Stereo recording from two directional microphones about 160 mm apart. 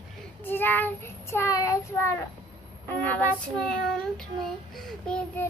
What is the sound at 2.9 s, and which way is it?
Speech, 10° left (ahead or behind).